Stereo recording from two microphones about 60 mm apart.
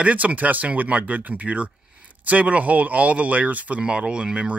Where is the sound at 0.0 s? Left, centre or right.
Right.